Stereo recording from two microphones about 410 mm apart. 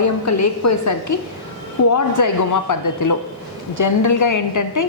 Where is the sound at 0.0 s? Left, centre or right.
Left.